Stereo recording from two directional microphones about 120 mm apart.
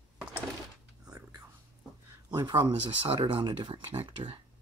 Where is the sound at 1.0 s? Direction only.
30° right (ahead or behind).